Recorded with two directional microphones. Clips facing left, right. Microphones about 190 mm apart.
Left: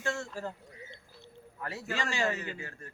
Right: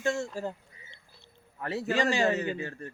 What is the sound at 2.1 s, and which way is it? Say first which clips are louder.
Speech: right 6 dB; 35° right (ahead or behind).